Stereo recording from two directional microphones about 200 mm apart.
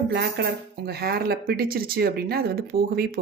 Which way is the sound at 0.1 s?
55° right (ahead or behind).